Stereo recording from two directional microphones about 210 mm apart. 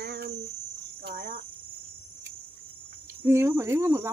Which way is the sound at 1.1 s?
40° right (ahead or behind).